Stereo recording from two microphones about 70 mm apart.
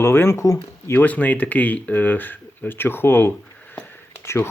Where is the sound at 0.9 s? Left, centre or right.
Left.